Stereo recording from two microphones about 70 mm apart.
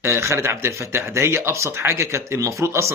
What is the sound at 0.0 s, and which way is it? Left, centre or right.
A man's voice, right.